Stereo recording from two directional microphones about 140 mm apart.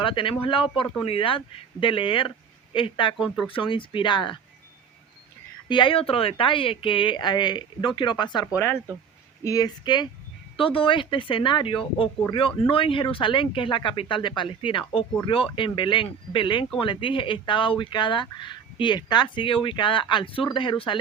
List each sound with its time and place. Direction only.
0.0 s speech: 35° left (ahead or behind)
3.2 s speech: centre (ahead or behind)
3.4 s speech: 40° left (ahead or behind)
5.6 s speech: 35° left (ahead or behind)